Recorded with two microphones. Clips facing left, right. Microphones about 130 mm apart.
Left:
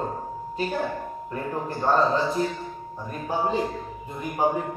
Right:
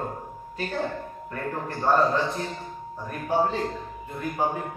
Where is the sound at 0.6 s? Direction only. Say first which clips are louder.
Left 2 dB; 15° left (ahead or behind).